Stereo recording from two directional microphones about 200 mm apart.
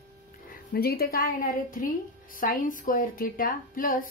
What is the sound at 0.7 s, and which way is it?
A woman's voice, 50° left (ahead or behind).